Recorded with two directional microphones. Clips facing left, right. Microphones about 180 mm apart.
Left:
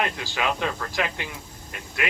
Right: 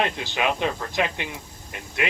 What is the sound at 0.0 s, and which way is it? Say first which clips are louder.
Speech: right 2 dB; 20° right (ahead or behind).